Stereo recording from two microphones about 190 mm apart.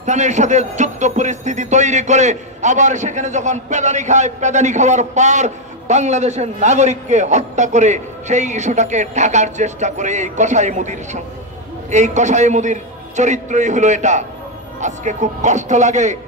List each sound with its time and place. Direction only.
0.0 s a man's voice: 40° right (ahead or behind)